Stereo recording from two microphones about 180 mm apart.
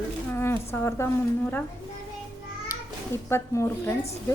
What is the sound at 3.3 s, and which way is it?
Speech, 15° left (ahead or behind).